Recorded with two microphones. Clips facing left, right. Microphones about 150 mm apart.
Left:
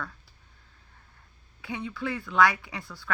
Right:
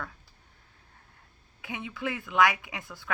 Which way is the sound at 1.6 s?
20° right (ahead or behind).